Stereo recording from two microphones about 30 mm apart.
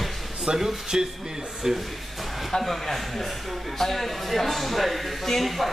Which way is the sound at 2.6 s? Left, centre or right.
Centre.